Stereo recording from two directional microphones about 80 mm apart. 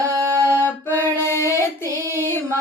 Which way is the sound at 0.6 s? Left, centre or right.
Left.